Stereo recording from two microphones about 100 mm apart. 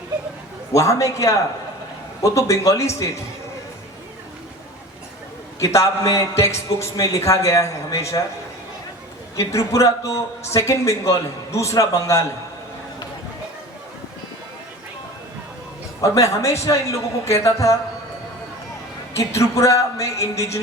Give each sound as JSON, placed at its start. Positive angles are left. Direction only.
{"t": 0.7, "sound": "a man's voice", "side_deg": 30}
{"t": 5.5, "sound": "a man's voice", "side_deg": 30}
{"t": 9.3, "sound": "a man's voice", "side_deg": 30}
{"t": 16.0, "sound": "a man's voice", "side_deg": 30}
{"t": 19.1, "sound": "a man's voice", "side_deg": 30}